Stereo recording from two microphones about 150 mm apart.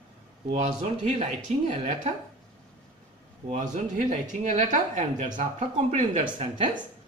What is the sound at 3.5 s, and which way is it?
Speech, 55° right (ahead or behind).